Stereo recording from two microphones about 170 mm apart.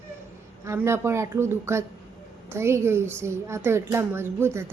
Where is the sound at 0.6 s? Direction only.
15° right (ahead or behind).